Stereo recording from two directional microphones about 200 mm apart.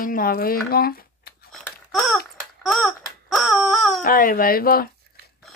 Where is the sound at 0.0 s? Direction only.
45° left (ahead or behind).